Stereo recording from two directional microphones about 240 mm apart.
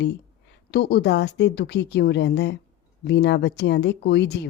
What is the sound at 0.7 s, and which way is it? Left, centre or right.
A woman's voice, left.